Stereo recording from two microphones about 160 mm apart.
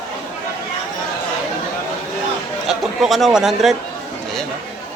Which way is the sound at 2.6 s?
Centre (ahead or behind).